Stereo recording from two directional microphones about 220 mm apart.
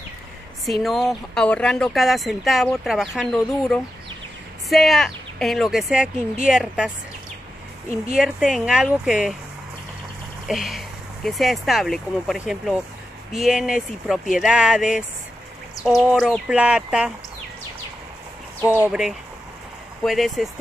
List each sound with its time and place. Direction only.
0.7 s a woman's voice: centre (ahead or behind)
8.1 s speech: centre (ahead or behind)
10.5 s speech: centre (ahead or behind)
18.6 s speech: 5° right (ahead or behind)